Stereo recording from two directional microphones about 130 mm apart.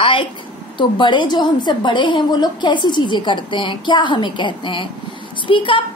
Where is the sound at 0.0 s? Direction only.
45° left (ahead or behind).